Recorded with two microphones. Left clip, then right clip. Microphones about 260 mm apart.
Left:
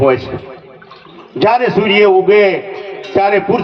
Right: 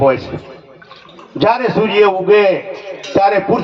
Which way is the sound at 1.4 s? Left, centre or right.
Centre.